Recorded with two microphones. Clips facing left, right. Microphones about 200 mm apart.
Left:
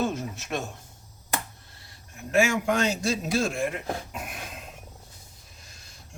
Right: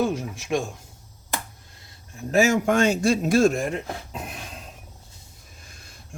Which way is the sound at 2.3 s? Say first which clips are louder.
Right 4 dB; 40° right (ahead or behind).